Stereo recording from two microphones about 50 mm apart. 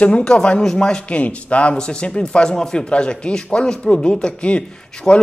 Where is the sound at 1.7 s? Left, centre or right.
Centre.